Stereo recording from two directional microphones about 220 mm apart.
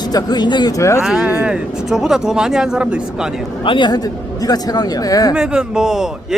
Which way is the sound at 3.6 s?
20° left (ahead or behind).